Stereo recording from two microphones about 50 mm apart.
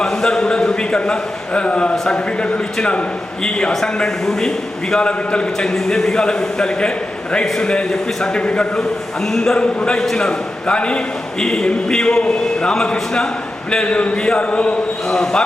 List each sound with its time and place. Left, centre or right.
0.0 s a man's voice: centre
9.2 s a man's voice: centre
9.6 s a man's voice: left
10.0 s a man's voice: centre
10.2 s a man's voice: left
15.0 s a man's voice: centre